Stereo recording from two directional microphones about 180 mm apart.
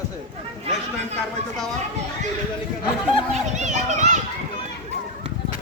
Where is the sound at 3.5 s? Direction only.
40° right (ahead or behind).